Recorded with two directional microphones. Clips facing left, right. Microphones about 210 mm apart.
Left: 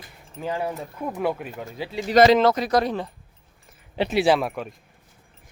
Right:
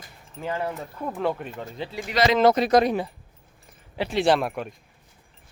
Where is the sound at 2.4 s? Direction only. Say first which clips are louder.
Right 2 dB; 20° right (ahead or behind).